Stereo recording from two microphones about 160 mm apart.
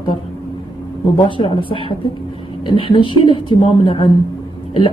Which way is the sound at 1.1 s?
30° left (ahead or behind).